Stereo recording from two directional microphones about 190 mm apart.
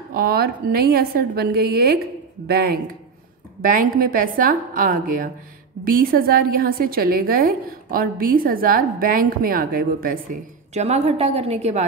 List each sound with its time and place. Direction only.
0.1 s a woman's voice: 55° right (ahead or behind)
10.7 s a woman's voice: 35° right (ahead or behind)